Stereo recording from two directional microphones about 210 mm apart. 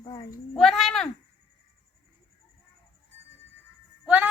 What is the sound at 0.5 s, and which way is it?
Speech, centre (ahead or behind).